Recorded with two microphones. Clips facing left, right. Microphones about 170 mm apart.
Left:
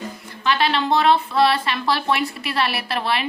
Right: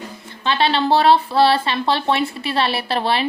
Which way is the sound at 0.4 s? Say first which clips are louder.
Right 2 dB; 30° right (ahead or behind).